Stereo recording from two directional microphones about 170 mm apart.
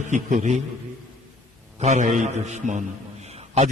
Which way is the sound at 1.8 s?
45° right (ahead or behind).